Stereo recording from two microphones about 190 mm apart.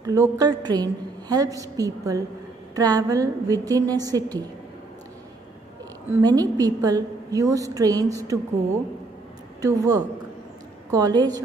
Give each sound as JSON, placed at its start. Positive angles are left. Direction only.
{"t": 0.0, "sound": "a woman's voice", "side_deg": -15}
{"t": 6.2, "sound": "a woman's voice", "side_deg": -20}
{"t": 9.6, "sound": "a woman's voice", "side_deg": -20}